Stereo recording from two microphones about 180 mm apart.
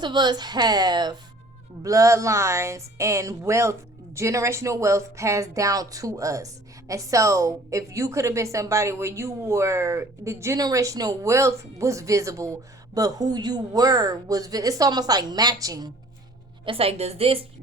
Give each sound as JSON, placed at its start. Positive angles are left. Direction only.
{"t": 0.0, "sound": "a woman's voice", "side_deg": -25}
{"t": 16.6, "sound": "a woman's voice", "side_deg": -35}